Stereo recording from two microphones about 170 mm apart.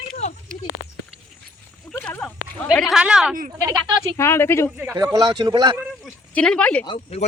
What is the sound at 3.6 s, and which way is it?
Speech, 20° right (ahead or behind).